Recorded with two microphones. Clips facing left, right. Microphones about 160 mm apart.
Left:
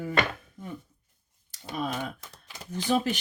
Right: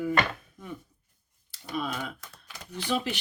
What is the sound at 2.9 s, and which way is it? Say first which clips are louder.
Speech: left 4 dB; 45° left (ahead or behind).